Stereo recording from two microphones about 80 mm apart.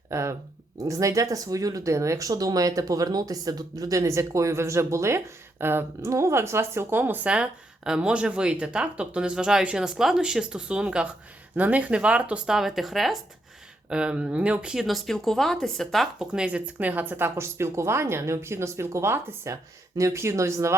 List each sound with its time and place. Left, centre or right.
0.1 s speech: right
7.3 s speech: centre
12.5 s speech: centre
13.9 s speech: centre
16.1 s speech: centre; by 20.7 s right